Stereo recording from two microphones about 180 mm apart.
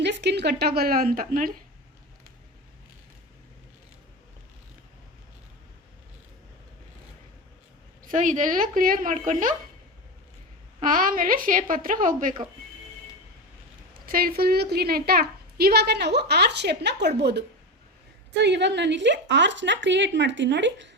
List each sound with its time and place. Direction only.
0.0 s a woman's voice: 75° right (ahead or behind); by 1.5 s 55° right (ahead or behind)
8.0 s a woman's voice: 45° right (ahead or behind)
10.8 s a woman's voice: 50° right (ahead or behind)
13.9 s a woman's voice: 55° right (ahead or behind); by 20.9 s 85° right